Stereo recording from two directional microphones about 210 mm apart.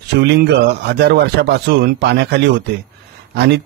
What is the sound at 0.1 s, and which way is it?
A man's voice, 55° right (ahead or behind).